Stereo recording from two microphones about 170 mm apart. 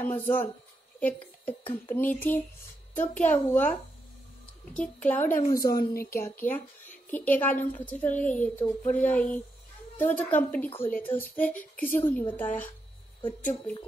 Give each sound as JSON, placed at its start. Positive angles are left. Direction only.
{"t": 0.0, "sound": "speech", "side_deg": 10}
{"t": 4.7, "sound": "speech", "side_deg": 10}
{"t": 5.5, "sound": "a woman's voice", "side_deg": 20}